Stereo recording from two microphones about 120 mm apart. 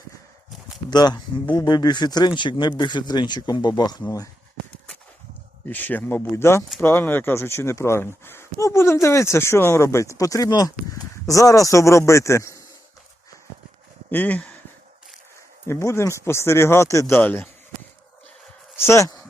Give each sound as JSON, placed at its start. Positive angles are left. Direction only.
{"t": 0.9, "sound": "speech", "side_deg": 35}
{"t": 5.6, "sound": "speech", "side_deg": 15}
{"t": 14.1, "sound": "speech", "side_deg": 15}
{"t": 15.6, "sound": "speech", "side_deg": 25}
{"t": 18.8, "sound": "speech", "side_deg": 25}